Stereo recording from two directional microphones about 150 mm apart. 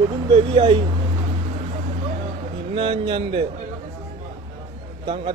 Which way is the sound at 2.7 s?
35° right (ahead or behind).